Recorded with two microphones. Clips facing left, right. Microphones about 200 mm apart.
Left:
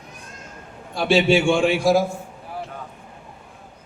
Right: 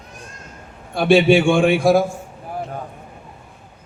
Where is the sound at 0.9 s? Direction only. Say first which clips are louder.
Right 4 dB; 55° right (ahead or behind).